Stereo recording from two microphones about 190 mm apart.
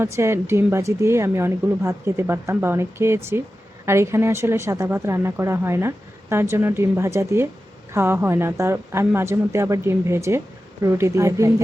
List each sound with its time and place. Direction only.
0.0 s speech: 15° right (ahead or behind)